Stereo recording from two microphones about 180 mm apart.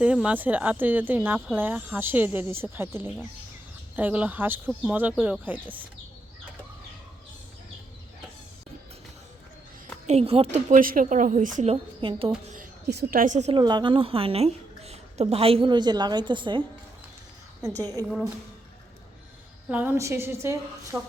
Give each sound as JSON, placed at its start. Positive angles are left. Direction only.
{"t": 0.0, "sound": "speech", "side_deg": -5}
{"t": 10.1, "sound": "a woman's voice", "side_deg": -35}
{"t": 12.5, "sound": "a woman's voice", "side_deg": -60}
{"t": 13.6, "sound": "a woman's voice", "side_deg": -25}
{"t": 18.0, "sound": "a woman's voice", "side_deg": -20}
{"t": 19.6, "sound": "speech", "side_deg": -10}